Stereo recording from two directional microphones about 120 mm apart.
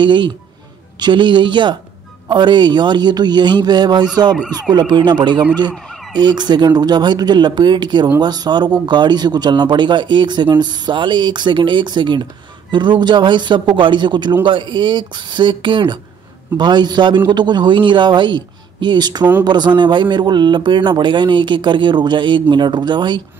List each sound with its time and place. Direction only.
0.9 s a man's voice: 40° right (ahead or behind)